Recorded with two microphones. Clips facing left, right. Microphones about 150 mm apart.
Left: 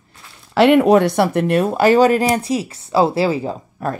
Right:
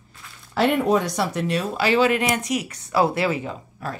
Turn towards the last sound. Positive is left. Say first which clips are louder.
# left 8 dB
turn(degrees=50)  # may be behind; listen again after turning